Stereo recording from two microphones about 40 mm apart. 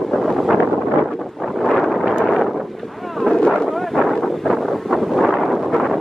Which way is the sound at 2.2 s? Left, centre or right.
Centre.